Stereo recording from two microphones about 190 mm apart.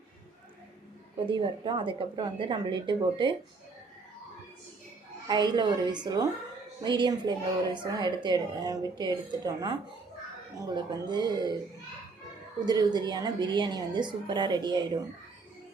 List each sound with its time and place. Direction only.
1.2 s a woman's voice: 25° right (ahead or behind)
5.3 s a woman's voice: 20° right (ahead or behind)
10.8 s a woman's voice: 25° right (ahead or behind)
12.5 s a woman's voice: 20° right (ahead or behind)